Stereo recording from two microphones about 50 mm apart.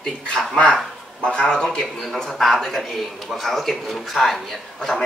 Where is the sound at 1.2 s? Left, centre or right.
Centre.